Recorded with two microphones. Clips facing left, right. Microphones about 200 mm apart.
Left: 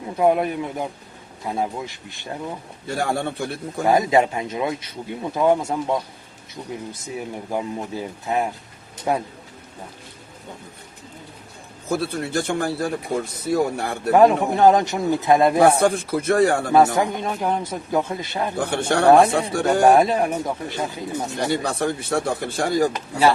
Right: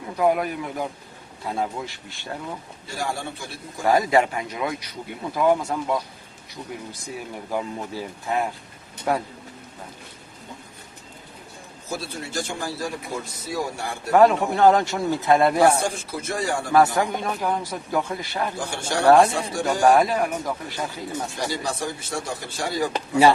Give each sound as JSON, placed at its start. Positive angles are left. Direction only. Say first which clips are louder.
{"t": 0.2, "sound": "a man's voice", "louder": "left 3 dB", "side_deg": 25}
{"t": 2.8, "sound": "speech", "louder": "left 6 dB", "side_deg": 60}
{"t": 3.8, "sound": "a man's voice", "louder": "left 2 dB", "side_deg": 20}
{"t": 11.9, "sound": "speech", "louder": "left 8 dB", "side_deg": 60}
{"t": 14.1, "sound": "speech", "louder": "left 2 dB", "side_deg": 15}
{"t": 15.6, "sound": "speech", "louder": "left 3 dB", "side_deg": 60}
{"t": 16.7, "sound": "a man's voice", "louder": "right 2 dB", "side_deg": 20}
{"t": 18.5, "sound": "speech", "louder": "left 6 dB", "side_deg": 60}
{"t": 19.0, "sound": "speech", "louder": "left 1 dB", "side_deg": 15}
{"t": 19.3, "sound": "speech", "louder": "left 5 dB", "side_deg": 60}
{"t": 19.8, "sound": "a man's voice", "louder": "left 2 dB", "side_deg": 25}
{"t": 21.4, "sound": "speech", "louder": "left 7 dB", "side_deg": 60}